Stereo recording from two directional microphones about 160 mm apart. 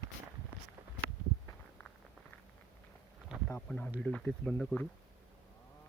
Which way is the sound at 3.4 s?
5° left (ahead or behind).